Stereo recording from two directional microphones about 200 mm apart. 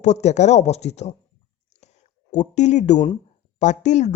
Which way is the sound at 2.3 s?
35° left (ahead or behind).